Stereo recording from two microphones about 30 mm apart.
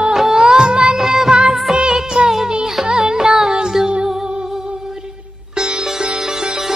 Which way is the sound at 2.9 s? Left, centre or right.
Right.